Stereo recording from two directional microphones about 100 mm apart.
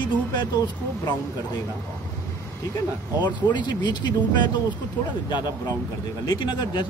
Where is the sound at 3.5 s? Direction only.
45° left (ahead or behind).